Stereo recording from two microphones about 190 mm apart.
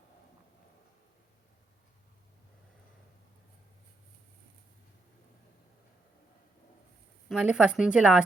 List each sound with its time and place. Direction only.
7.3 s speech: 5° right (ahead or behind)